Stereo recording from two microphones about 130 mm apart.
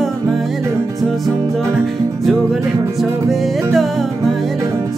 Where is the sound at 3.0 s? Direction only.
Centre (ahead or behind).